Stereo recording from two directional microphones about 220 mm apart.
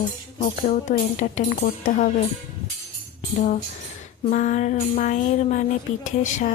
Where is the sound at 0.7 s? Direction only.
35° left (ahead or behind).